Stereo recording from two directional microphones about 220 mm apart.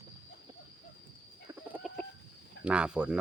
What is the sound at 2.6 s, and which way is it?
Speech, 5° right (ahead or behind).